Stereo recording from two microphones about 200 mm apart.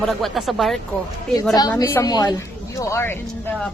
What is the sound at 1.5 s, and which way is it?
A woman's voice, 20° left (ahead or behind).